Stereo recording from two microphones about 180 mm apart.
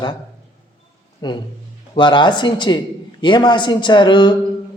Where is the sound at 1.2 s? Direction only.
25° left (ahead or behind).